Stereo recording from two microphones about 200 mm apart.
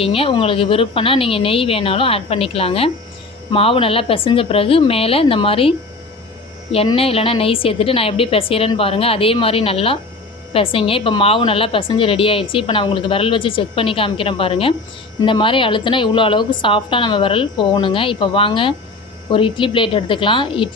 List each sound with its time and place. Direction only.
0.0 s a woman's voice: 30° left (ahead or behind)